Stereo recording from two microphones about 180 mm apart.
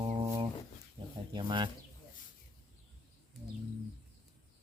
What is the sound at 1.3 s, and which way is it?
Speech, 25° right (ahead or behind).